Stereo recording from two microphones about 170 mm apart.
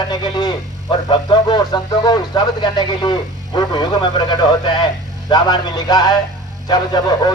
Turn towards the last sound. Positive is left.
turn(degrees=25)  # may be behind; listen again after turning